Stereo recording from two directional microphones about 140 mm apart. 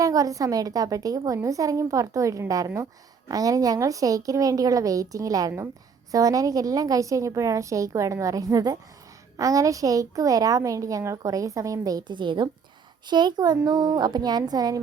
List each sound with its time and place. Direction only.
0.0 s a woman's voice: 25° right (ahead or behind)